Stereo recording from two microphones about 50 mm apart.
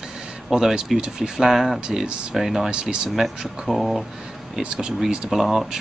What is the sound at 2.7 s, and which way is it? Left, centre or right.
Speech, centre.